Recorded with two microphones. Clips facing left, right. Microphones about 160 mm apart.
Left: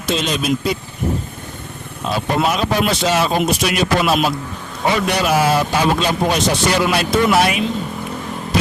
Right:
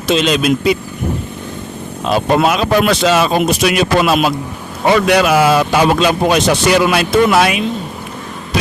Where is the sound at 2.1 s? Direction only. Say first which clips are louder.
Right 5 dB; 90° right.